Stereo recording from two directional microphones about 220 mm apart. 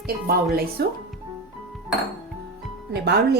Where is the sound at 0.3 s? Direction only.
45° right (ahead or behind).